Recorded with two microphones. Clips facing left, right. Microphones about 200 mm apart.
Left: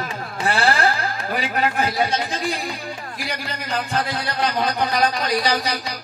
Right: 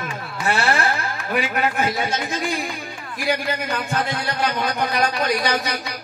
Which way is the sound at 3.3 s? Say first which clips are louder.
Right 6 dB; 55° right (ahead or behind).